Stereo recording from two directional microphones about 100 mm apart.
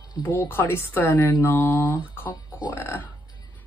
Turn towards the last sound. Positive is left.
turn(degrees=20)  # may be behind; listen again after turning